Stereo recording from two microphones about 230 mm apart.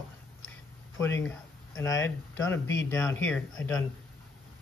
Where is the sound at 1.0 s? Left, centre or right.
Centre.